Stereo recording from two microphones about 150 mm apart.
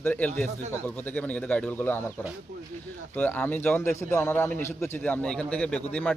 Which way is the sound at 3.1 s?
10° left (ahead or behind).